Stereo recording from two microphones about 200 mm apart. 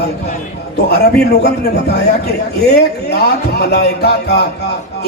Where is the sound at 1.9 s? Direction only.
55° left (ahead or behind).